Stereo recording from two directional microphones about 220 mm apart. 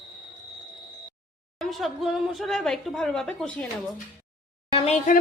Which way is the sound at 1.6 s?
Centre (ahead or behind).